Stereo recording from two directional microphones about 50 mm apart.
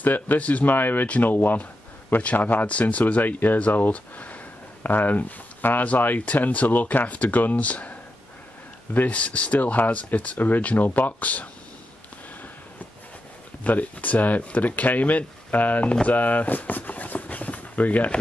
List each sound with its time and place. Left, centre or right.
0.0 s a man's voice: left
0.7 s a man's voice: left
13.7 s speech: left